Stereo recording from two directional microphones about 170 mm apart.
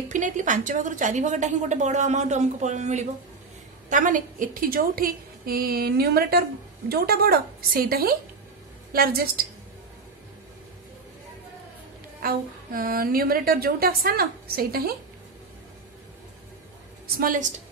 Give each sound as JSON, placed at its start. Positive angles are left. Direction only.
{"t": 0.1, "sound": "a woman's voice", "side_deg": -50}
{"t": 12.2, "sound": "a woman's voice", "side_deg": -60}
{"t": 17.2, "sound": "a woman's voice", "side_deg": -50}